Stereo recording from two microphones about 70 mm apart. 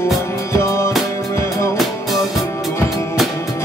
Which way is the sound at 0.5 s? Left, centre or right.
Left.